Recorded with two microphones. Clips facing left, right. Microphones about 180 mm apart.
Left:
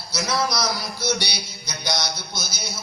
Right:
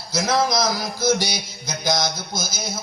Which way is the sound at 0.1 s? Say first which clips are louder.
Right 4 dB; 50° right (ahead or behind).